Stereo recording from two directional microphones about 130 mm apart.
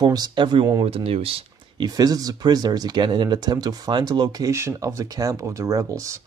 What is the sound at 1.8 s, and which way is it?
Speech, 30° right (ahead or behind).